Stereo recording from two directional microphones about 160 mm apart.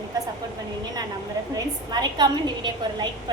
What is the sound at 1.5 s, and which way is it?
A woman's voice, 25° right (ahead or behind).